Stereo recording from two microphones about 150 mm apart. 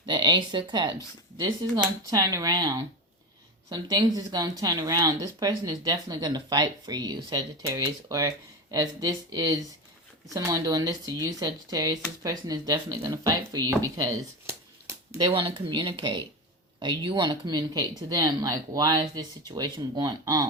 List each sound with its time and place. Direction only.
0.0 s speech: 30° right (ahead or behind)
15.2 s speech: 35° right (ahead or behind)